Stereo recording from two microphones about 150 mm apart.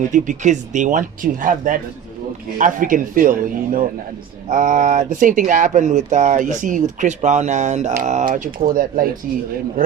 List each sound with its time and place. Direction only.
0.1 s a man's voice: 55° right (ahead or behind)